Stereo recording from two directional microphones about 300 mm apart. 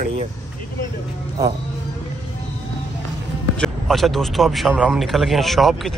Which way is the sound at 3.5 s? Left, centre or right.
Centre.